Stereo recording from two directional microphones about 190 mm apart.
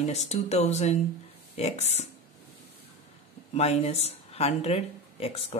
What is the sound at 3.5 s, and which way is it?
Speech, 35° left (ahead or behind).